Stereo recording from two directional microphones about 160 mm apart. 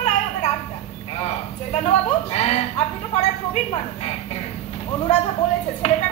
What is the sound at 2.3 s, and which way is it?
Speech, 40° left (ahead or behind).